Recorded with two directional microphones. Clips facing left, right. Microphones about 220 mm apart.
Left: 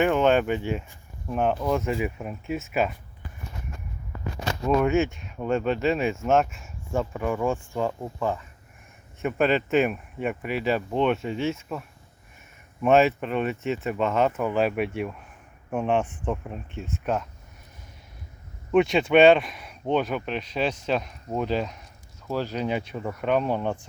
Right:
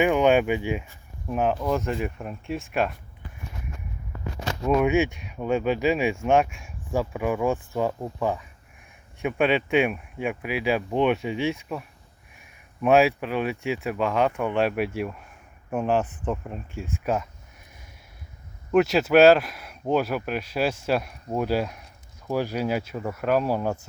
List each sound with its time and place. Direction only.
0.0 s speech: 10° right (ahead or behind)
4.7 s speech: 5° right (ahead or behind)
5.0 s speech: 15° right (ahead or behind)
5.4 s speech: 5° right (ahead or behind)
9.2 s speech: centre (ahead or behind)
12.8 s speech: centre (ahead or behind)
18.7 s speech: 5° right (ahead or behind)